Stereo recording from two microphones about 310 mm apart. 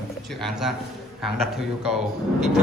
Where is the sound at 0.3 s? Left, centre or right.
Centre.